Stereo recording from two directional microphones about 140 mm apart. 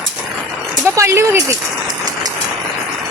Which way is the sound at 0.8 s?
20° right (ahead or behind).